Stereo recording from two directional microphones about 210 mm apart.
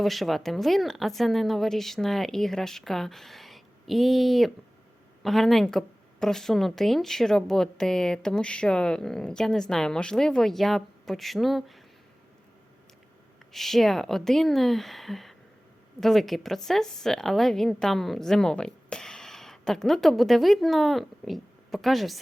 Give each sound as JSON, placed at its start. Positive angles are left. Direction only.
{"t": 0.0, "sound": "speech", "side_deg": 0}
{"t": 13.5, "sound": "speech", "side_deg": 0}